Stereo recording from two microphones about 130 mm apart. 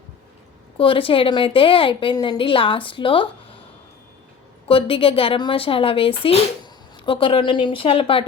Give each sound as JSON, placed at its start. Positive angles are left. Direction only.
{"t": 0.8, "sound": "speech", "side_deg": 45}
{"t": 4.7, "sound": "speech", "side_deg": 45}